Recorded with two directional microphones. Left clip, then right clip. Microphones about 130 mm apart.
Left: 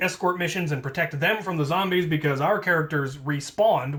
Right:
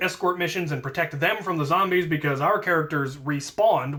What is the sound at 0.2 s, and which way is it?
Speech, 30° right (ahead or behind).